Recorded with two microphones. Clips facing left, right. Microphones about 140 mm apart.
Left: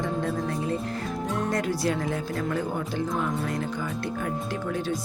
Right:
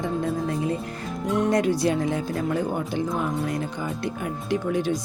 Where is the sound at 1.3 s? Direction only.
20° right (ahead or behind).